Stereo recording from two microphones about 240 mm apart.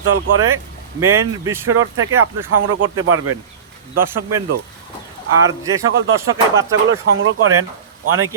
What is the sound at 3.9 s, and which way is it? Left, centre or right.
Speech, right.